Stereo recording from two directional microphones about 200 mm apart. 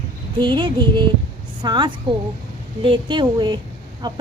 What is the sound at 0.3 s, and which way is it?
A woman's voice, 25° right (ahead or behind).